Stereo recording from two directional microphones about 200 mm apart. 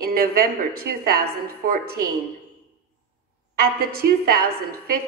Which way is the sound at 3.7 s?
50° right (ahead or behind).